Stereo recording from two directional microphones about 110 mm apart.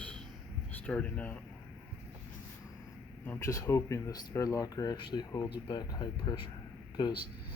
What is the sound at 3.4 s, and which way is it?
Speech, 30° left (ahead or behind).